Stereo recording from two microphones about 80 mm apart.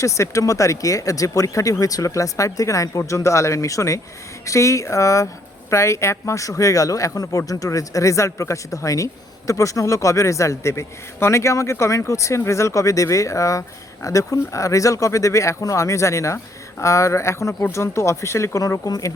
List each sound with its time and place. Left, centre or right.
0.0 s a man's voice: left